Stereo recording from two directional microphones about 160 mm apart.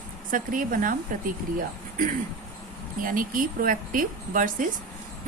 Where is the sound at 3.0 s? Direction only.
60° right (ahead or behind).